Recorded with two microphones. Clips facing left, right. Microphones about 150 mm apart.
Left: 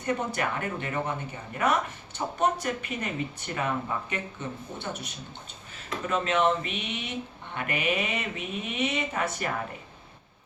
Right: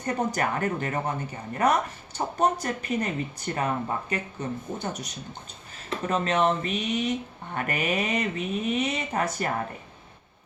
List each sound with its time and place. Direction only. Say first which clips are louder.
0.0 s speech: right 2 dB; 40° right (ahead or behind)